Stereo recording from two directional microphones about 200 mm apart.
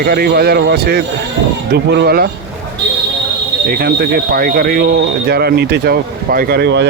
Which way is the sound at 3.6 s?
50° right (ahead or behind).